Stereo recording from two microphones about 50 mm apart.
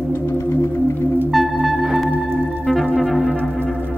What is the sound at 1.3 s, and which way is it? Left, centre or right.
Music, centre.